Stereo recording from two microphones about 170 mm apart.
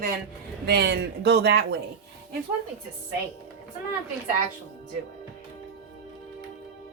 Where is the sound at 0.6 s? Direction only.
70° right (ahead or behind).